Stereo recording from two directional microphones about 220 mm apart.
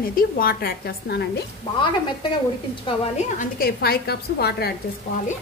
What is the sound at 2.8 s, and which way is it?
A woman's voice, 35° left (ahead or behind).